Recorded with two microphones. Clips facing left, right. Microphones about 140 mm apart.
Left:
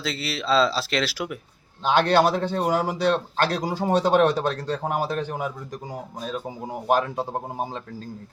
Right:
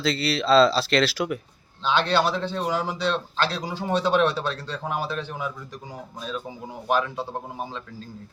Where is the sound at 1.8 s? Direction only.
50° left (ahead or behind).